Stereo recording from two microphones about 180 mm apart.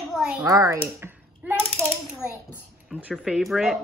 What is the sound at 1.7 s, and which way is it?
Coin, 10° left (ahead or behind).